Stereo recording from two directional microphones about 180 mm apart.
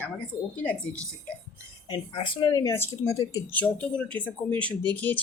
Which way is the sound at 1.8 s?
25° left (ahead or behind).